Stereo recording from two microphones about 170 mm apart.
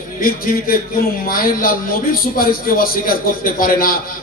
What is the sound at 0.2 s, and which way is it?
A man's voice, 60° left (ahead or behind).